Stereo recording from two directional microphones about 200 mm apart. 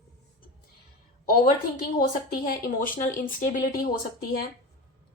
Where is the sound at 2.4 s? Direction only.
45° left (ahead or behind).